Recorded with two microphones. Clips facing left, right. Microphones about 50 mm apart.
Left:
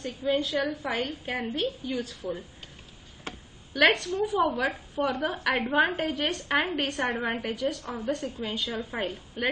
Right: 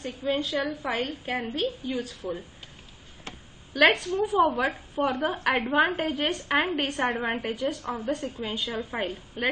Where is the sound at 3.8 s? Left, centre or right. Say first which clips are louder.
Right 1 dB; centre.